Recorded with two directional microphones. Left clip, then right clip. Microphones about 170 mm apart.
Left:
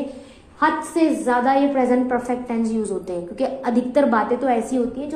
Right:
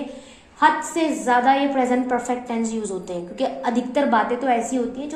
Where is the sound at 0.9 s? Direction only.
30° left (ahead or behind).